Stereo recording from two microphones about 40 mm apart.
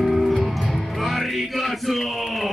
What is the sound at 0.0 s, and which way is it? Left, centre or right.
Music, centre.